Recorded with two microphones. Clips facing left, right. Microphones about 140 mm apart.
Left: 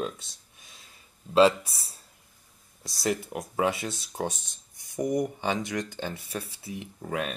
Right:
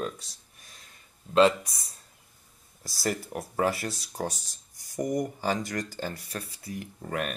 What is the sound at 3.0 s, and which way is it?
Speech, centre (ahead or behind).